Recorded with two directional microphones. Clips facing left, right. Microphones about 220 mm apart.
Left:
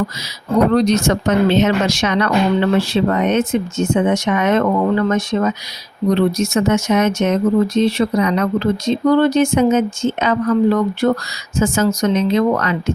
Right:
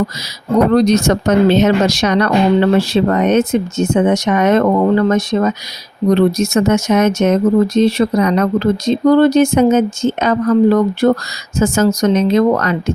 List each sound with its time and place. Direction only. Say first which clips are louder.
0.7 s speech: right 3 dB; 40° right (ahead or behind)